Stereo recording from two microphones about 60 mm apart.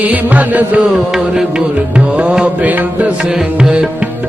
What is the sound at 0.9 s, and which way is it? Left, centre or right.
Music, centre.